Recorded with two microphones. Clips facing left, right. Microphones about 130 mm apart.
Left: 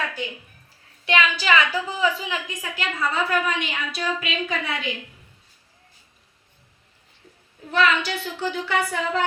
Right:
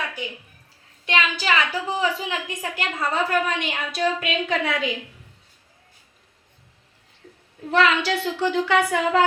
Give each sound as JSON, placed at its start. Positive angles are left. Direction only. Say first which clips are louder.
{"t": 1.1, "sound": "a woman's voice", "louder": "left 2 dB", "side_deg": -35}
{"t": 7.7, "sound": "speech", "louder": "right 2 dB", "side_deg": -65}